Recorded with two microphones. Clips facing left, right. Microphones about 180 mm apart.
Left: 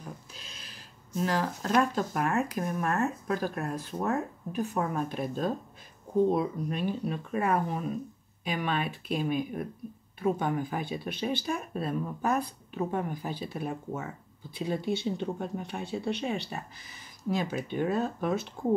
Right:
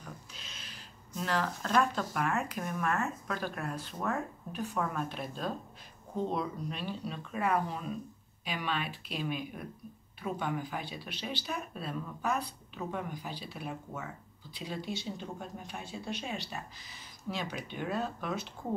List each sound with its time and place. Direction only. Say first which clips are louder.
1.2 s speech: left 3 dB; 40° left (ahead or behind)
6.7 s speech: left 7 dB; 50° left (ahead or behind)
17.2 s speech: left 7 dB; 45° left (ahead or behind)